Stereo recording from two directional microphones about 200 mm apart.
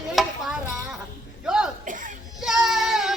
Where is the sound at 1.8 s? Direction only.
40° right (ahead or behind).